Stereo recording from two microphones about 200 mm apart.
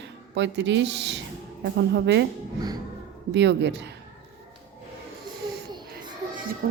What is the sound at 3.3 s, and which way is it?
Speech, 60° right (ahead or behind).